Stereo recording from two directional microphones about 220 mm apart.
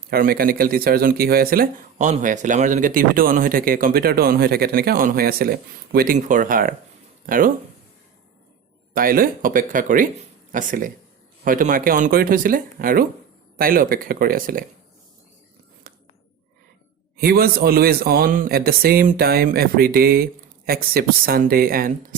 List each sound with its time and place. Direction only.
0.1 s speech: 40° right (ahead or behind)
8.9 s speech: 40° right (ahead or behind)
15.9 s a sound: 40° right (ahead or behind)
17.2 s speech: 45° right (ahead or behind)